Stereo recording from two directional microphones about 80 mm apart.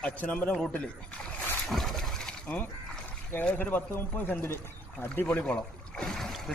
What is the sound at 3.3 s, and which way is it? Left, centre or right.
Speech, left.